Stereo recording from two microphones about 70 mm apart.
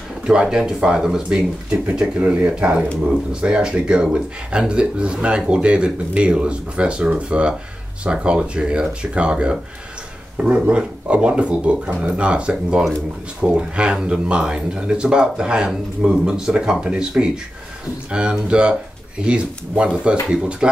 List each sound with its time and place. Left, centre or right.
0.3 s speech: centre